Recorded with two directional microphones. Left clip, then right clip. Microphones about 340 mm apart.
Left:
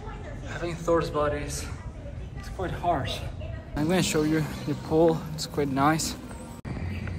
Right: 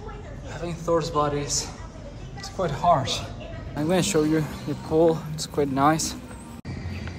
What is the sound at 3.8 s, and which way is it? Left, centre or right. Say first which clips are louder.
Speech: right 3 dB; centre.